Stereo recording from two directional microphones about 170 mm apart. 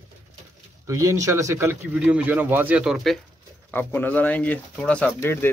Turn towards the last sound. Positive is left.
turn(degrees=15)  # may be behind; listen again after turning